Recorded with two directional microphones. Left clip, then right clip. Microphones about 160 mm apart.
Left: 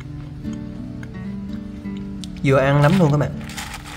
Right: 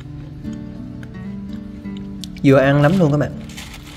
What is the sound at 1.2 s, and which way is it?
Music, centre (ahead or behind).